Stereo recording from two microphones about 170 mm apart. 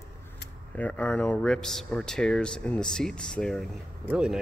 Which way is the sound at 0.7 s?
10° left (ahead or behind).